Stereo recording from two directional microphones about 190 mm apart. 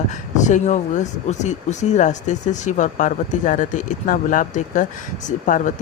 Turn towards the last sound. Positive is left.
turn(degrees=40)  # may be behind; listen again after turning